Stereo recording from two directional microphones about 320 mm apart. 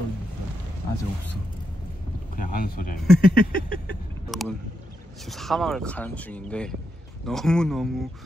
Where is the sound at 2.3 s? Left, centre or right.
Left.